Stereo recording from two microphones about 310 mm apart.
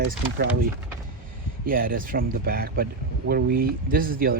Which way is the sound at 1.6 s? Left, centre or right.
Right.